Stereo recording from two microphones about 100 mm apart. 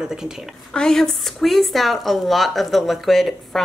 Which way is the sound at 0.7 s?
5° left (ahead or behind).